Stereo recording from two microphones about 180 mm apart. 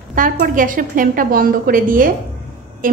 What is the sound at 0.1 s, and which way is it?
A woman's voice, 50° right (ahead or behind).